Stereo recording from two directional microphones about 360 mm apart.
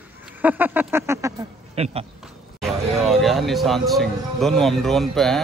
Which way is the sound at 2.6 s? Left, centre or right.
Centre.